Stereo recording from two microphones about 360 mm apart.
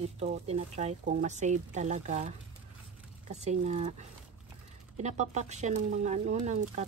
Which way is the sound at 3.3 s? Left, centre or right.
Centre.